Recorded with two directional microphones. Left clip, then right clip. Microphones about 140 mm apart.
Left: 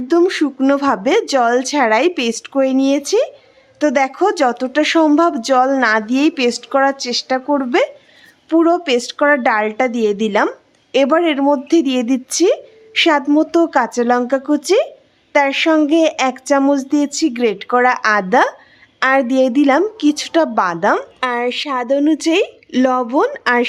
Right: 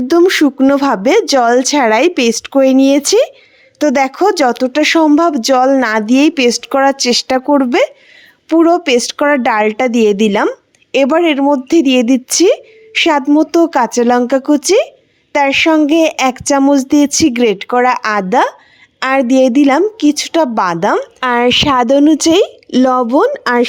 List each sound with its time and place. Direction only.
0.1 s a woman's voice: 45° right (ahead or behind)
10.5 s speech: 30° right (ahead or behind)
17.7 s speech: 30° right (ahead or behind)
21.2 s a woman's voice: 80° right; by 23.6 s 35° right (ahead or behind)